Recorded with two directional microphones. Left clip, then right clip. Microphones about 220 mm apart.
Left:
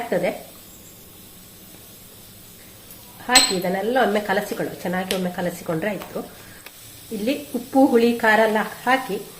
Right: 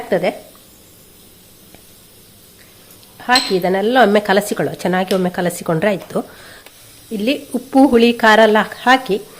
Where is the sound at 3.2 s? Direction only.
45° right (ahead or behind).